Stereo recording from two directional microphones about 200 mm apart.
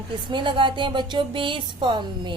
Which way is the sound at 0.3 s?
25° right (ahead or behind).